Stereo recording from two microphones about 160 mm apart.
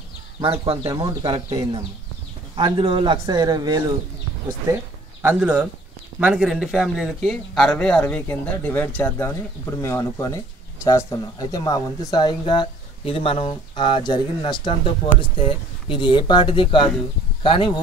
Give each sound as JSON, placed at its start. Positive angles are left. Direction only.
{"t": 0.8, "sound": "speech", "side_deg": -25}
{"t": 5.2, "sound": "a man's voice", "side_deg": -10}